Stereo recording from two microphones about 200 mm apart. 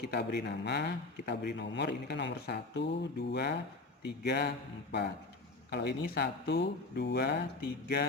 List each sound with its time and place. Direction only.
0.0 s speech: 55° left (ahead or behind)
4.2 s a sound: 55° left (ahead or behind)
5.7 s speech: 55° left (ahead or behind)